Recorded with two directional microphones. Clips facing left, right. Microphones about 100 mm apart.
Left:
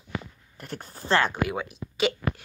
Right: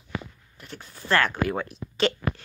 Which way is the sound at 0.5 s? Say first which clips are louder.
Left 8 dB; 45° left (ahead or behind).